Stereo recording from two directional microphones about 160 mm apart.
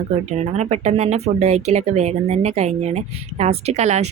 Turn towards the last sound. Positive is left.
turn(degrees=-45)  # may be behind; listen again after turning